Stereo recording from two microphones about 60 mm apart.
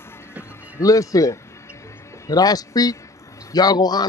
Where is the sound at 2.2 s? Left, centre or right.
Left.